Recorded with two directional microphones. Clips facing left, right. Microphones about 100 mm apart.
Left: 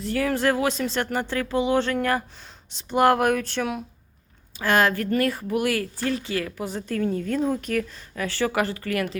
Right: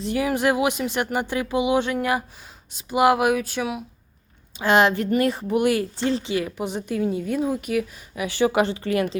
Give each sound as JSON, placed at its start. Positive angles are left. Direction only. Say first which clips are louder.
{"t": 0.0, "sound": "speech", "louder": "right 1 dB", "side_deg": -15}
{"t": 4.5, "sound": "a woman's voice", "louder": "right 3 dB", "side_deg": -20}